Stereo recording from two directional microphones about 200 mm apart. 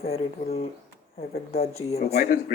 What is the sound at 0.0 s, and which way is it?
Speech, 30° left (ahead or behind).